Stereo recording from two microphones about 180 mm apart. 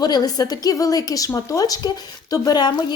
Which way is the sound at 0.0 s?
20° left (ahead or behind).